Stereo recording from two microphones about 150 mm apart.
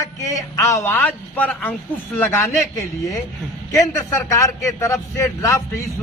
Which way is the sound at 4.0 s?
20° left (ahead or behind).